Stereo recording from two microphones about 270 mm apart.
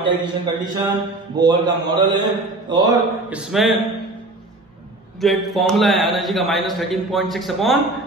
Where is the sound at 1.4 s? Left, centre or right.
Centre.